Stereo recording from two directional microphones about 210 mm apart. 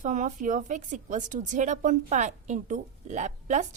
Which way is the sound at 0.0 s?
35° right (ahead or behind).